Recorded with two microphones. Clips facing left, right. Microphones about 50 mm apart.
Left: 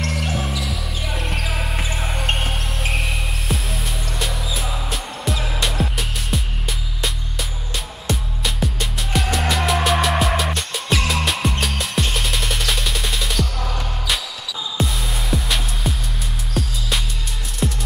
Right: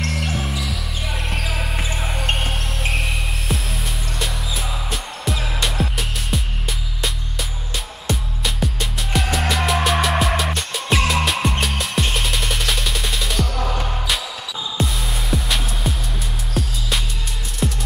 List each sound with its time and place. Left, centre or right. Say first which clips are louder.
0.1 s music: left 1 dB; centre
0.6 s basketball bounce: even; centre
4.2 s music: left 1 dB; centre
8.1 s music: even; centre
13.6 s music: right 3 dB; centre
14.8 s music: even; centre